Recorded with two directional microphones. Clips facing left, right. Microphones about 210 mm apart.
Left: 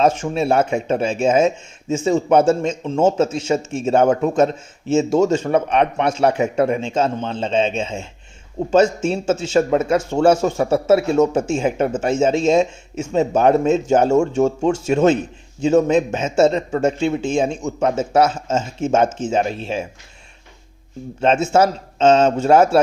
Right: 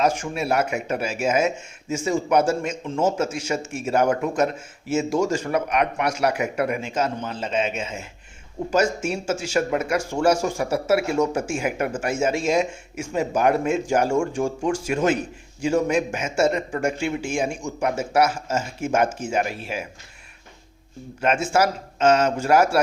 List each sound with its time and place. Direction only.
0.0 s speech: 25° left (ahead or behind)
21.2 s speech: 25° left (ahead or behind)